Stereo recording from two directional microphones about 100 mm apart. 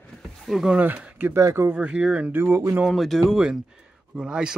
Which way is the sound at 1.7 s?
10° right (ahead or behind).